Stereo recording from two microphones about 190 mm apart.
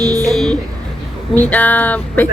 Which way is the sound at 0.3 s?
Centre (ahead or behind).